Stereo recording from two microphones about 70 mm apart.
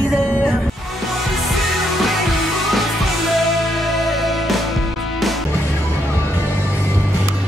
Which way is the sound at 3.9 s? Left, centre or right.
Centre.